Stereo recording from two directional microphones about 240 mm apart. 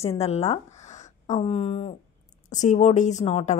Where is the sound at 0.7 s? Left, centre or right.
Left.